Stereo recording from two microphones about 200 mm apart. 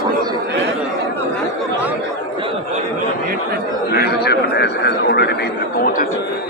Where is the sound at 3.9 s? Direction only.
55° left (ahead or behind).